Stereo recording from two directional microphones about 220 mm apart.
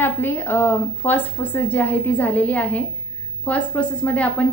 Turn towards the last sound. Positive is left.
turn(degrees=5)  # may be behind; listen again after turning